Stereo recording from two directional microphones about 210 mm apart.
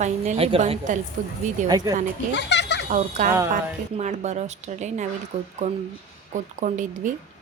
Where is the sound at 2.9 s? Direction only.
35° right (ahead or behind).